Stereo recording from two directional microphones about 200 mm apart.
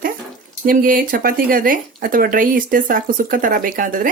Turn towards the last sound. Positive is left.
turn(degrees=-45)  # may be behind; listen again after turning